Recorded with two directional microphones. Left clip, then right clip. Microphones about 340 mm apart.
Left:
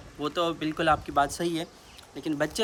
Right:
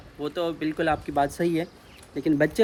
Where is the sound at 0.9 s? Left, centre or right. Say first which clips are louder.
Even; right.